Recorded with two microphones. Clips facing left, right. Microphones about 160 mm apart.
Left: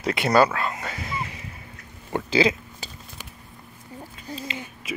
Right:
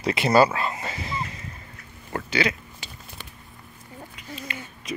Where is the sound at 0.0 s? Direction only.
Centre (ahead or behind).